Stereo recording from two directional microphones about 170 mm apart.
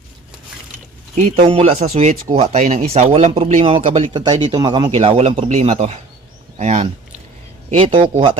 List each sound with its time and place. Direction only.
1.1 s speech: 35° right (ahead or behind)
7.7 s speech: 30° right (ahead or behind)